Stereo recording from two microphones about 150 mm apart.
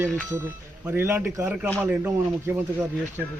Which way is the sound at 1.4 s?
5° right (ahead or behind).